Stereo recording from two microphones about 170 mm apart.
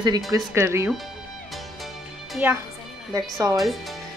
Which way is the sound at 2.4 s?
10° right (ahead or behind).